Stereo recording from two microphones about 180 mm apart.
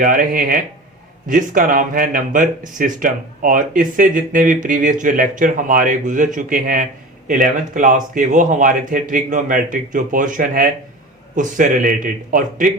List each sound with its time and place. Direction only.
0.0 s speech: 50° right (ahead or behind)